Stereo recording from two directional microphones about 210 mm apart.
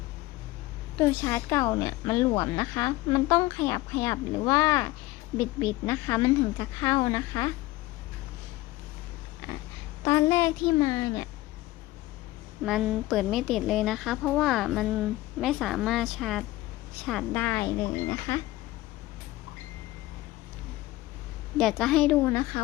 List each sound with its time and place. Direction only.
0.9 s speech: 15° left (ahead or behind)
10.0 s speech: 15° left (ahead or behind)
12.6 s a woman's voice: centre (ahead or behind)
21.6 s a woman's voice: centre (ahead or behind)